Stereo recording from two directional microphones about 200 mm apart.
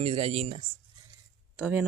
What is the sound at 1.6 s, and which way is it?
Speech, 5° right (ahead or behind).